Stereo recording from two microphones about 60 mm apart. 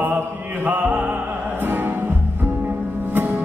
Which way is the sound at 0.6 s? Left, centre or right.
Right.